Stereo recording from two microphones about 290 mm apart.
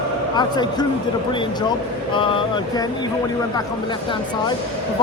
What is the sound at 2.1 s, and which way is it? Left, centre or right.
Speech, centre.